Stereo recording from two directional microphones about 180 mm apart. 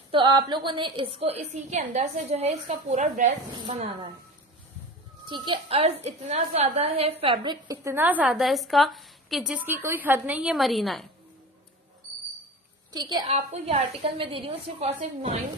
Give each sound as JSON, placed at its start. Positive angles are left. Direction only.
{"t": 0.1, "sound": "a woman's voice", "side_deg": -25}
{"t": 5.2, "sound": "a woman's voice", "side_deg": -25}
{"t": 7.6, "sound": "a woman's voice", "side_deg": -15}
{"t": 12.9, "sound": "a woman's voice", "side_deg": -20}
{"t": 13.3, "sound": "a woman's voice", "side_deg": -35}